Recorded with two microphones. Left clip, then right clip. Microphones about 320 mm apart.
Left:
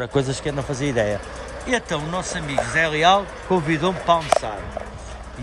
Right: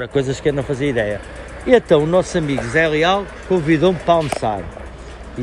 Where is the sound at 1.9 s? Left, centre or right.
Centre.